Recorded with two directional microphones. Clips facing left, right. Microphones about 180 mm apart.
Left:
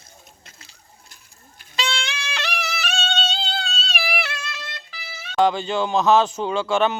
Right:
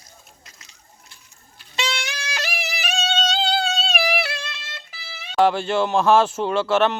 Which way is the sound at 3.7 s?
50° right (ahead or behind).